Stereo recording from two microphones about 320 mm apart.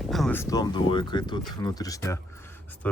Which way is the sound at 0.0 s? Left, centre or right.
Centre.